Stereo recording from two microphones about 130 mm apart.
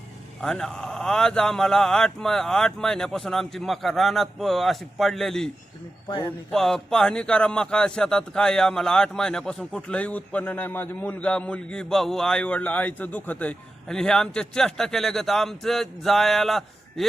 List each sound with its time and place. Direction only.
0.4 s a man's voice: 5° left (ahead or behind)
6.1 s speech: 35° left (ahead or behind)
6.5 s a man's voice: 5° left (ahead or behind)